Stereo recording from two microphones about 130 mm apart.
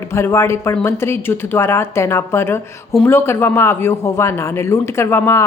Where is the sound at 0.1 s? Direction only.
20° left (ahead or behind).